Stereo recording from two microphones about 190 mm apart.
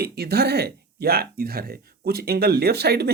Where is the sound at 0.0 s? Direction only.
55° right (ahead or behind).